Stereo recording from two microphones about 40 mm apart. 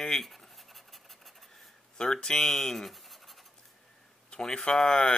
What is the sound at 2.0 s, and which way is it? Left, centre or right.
Speech, centre.